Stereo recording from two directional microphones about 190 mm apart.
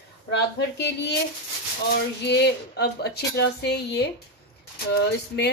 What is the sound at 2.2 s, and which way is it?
A woman's voice, 60° left (ahead or behind).